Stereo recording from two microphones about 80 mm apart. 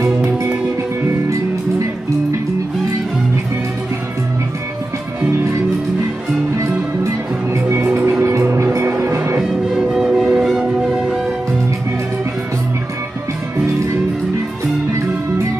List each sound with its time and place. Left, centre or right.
0.0 s music: right
6.6 s music: right
7.7 s music: right
9.4 s music: centre